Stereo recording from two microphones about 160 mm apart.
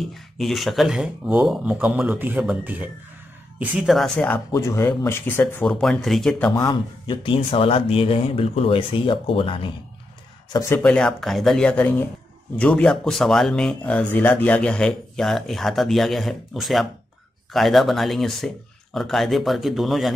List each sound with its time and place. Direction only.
0.0 s speech: centre (ahead or behind)
4.5 s speech: 20° left (ahead or behind)
5.7 s speech: centre (ahead or behind)
6.5 s speech: 25° left (ahead or behind)
10.5 s speech: 20° left (ahead or behind)
10.8 s speech: 5° left (ahead or behind)